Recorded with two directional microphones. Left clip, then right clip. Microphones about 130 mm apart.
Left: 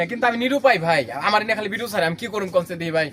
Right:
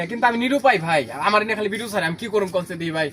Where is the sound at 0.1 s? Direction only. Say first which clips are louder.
Right 1 dB; 30° left (ahead or behind).